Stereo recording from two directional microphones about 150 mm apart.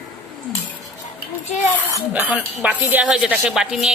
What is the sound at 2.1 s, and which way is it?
A woman's voice, 10° right (ahead or behind).